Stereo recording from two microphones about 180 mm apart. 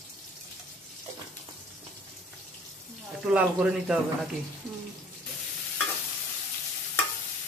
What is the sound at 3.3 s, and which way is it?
Speech, 5° right (ahead or behind).